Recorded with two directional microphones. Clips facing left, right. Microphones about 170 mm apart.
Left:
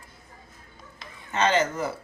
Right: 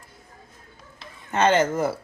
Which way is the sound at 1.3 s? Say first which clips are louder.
Right 4 dB; 50° right (ahead or behind).